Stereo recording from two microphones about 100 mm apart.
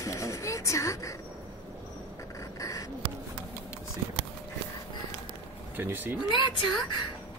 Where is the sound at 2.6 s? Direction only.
35° left (ahead or behind).